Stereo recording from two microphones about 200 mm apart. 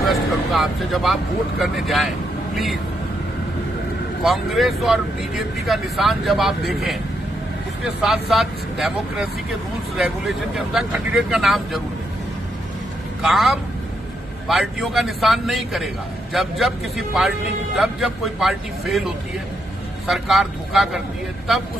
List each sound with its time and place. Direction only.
0.1 s speech: centre (ahead or behind)
4.2 s speech: centre (ahead or behind)
13.2 s speech: centre (ahead or behind)